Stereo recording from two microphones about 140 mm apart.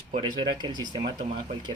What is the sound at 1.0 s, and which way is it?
Speech, 60° right (ahead or behind).